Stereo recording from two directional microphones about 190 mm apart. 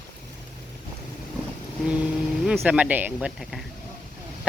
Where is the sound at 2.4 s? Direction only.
Centre (ahead or behind).